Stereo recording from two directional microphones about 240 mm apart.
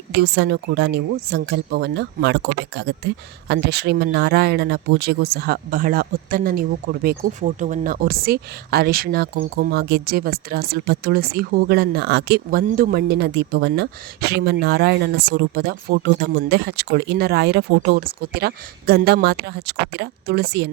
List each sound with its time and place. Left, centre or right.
0.2 s speech: right